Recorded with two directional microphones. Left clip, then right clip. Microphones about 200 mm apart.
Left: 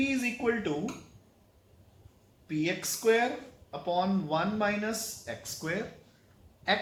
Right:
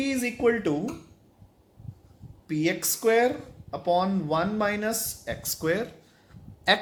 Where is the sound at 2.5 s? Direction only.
55° right (ahead or behind).